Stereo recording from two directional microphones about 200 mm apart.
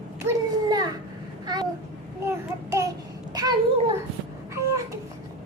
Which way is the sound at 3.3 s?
20° right (ahead or behind).